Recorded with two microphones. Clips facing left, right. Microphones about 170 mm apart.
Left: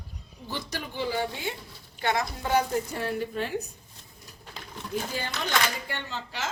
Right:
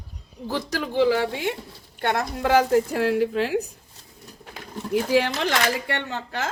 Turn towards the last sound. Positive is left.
turn(degrees=-55)  # may be behind; listen again after turning